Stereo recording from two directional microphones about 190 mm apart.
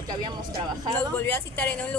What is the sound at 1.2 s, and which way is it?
Speech, 10° left (ahead or behind).